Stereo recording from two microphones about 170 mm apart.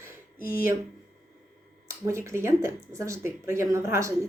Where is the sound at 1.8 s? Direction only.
15° right (ahead or behind).